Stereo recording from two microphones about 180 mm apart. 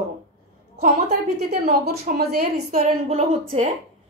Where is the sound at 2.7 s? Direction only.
40° right (ahead or behind).